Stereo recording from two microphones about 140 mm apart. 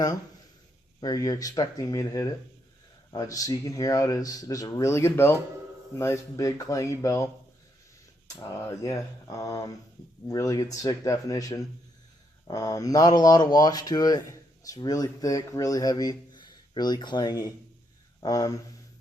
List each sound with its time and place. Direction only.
1.0 s speech: 25° left (ahead or behind)
8.4 s speech: 20° left (ahead or behind)